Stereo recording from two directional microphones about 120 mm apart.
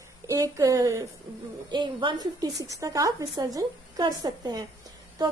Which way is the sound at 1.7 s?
40° right (ahead or behind).